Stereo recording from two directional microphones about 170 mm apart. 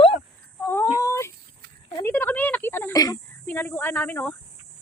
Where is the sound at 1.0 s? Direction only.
15° left (ahead or behind).